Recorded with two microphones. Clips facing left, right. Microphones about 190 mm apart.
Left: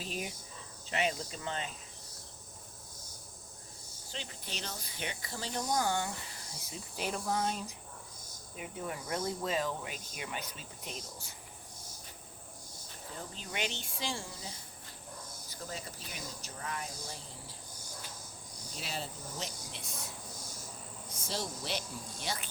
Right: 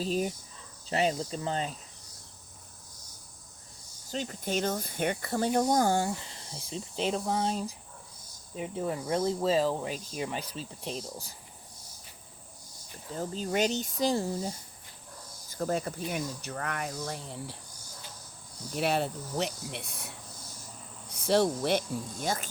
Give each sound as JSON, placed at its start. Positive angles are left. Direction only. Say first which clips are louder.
{"t": 0.0, "sound": "speech", "louder": "right 10 dB", "side_deg": -35}
{"t": 4.1, "sound": "speech", "louder": "right 12 dB", "side_deg": -45}
{"t": 13.1, "sound": "speech", "louder": "right 11 dB", "side_deg": -40}
{"t": 15.4, "sound": "speech", "louder": "right 14 dB", "side_deg": -50}
{"t": 18.7, "sound": "speech", "louder": "right 13 dB", "side_deg": -65}